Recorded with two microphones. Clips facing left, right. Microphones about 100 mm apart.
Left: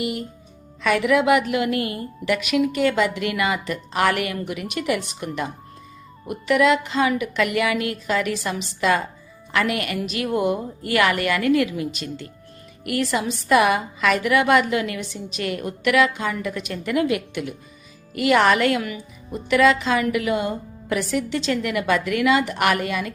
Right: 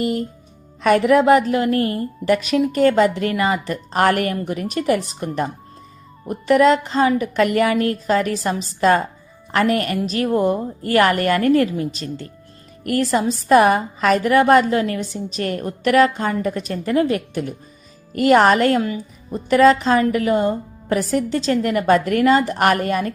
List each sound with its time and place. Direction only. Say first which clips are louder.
0.0 s speech: right 5 dB; 40° right (ahead or behind)